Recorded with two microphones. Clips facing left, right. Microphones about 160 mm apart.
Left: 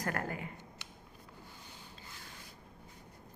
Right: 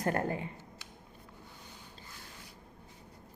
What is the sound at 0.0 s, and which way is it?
Speech, 25° right (ahead or behind).